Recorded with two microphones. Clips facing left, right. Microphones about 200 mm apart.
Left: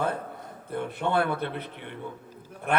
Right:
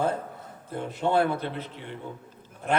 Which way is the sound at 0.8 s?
60° left (ahead or behind).